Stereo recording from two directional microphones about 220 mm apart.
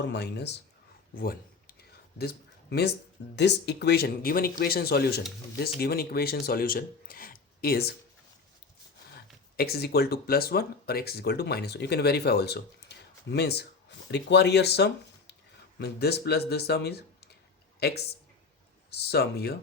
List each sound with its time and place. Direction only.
0.0 s speech: 50° left (ahead or behind)
1.1 s a sound: 40° left (ahead or behind)
3.3 s speech: 50° left (ahead or behind)
9.1 s speech: 45° left (ahead or behind)